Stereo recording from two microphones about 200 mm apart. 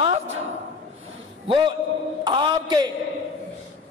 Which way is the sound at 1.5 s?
25° right (ahead or behind).